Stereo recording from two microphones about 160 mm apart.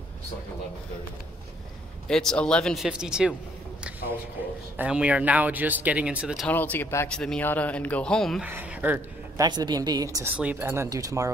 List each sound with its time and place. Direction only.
2.0 s speech: 5° left (ahead or behind)
4.7 s speech: 5° right (ahead or behind)
6.4 s speech: 10° left (ahead or behind)
7.1 s speech: 5° left (ahead or behind)
8.5 s speech: 10° right (ahead or behind)
9.4 s a woman's voice: 25° right (ahead or behind)
10.3 s speech: 10° right (ahead or behind)